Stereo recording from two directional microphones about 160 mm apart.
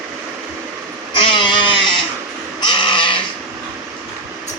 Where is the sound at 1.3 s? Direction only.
30° left (ahead or behind).